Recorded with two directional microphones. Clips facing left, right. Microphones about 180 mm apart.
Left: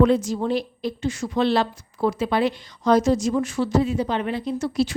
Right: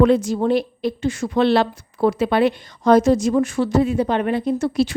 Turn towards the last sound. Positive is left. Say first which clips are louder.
# right 4 dB
turn(degrees=-60)  # may be behind; listen again after turning